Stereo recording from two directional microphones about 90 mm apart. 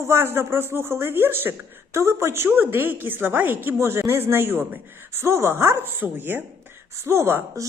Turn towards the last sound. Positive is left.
turn(degrees=-30)  # may be behind; listen again after turning